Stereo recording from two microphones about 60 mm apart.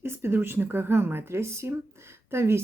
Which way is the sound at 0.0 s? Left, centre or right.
Right.